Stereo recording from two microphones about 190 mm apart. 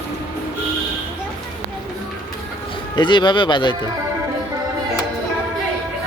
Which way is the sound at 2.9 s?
25° left (ahead or behind).